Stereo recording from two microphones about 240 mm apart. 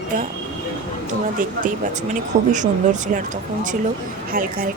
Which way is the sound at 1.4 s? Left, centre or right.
Right.